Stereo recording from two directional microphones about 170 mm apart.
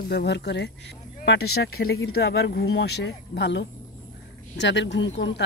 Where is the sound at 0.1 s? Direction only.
75° left (ahead or behind).